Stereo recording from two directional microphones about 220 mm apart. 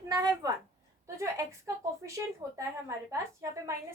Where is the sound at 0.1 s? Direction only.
15° right (ahead or behind).